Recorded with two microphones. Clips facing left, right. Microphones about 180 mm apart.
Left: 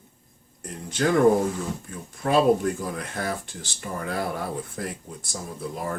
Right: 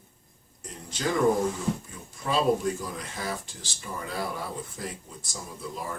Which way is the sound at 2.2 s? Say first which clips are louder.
Left 5 dB; 55° left (ahead or behind).